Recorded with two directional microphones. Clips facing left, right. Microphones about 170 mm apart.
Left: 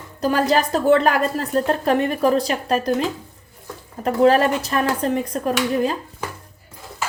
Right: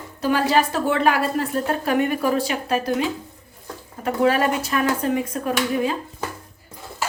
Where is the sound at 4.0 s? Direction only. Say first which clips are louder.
Left 4 dB; 35° left (ahead or behind).